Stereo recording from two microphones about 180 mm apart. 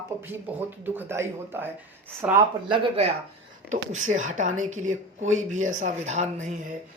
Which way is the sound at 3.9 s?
45° right (ahead or behind).